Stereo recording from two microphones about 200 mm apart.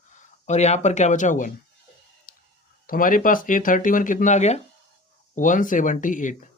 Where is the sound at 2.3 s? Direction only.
45° left (ahead or behind).